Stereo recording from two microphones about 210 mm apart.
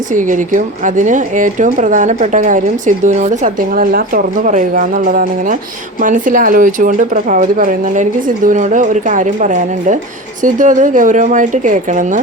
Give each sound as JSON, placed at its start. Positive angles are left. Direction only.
{"t": 0.1, "sound": "a woman's voice", "side_deg": -40}